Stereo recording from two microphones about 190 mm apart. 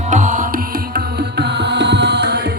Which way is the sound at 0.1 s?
40° right (ahead or behind).